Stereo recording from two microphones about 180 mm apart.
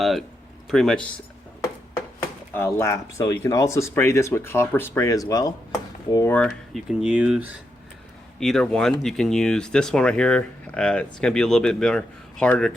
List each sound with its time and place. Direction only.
0.0 s speech: centre (ahead or behind)
2.5 s speech: 10° left (ahead or behind)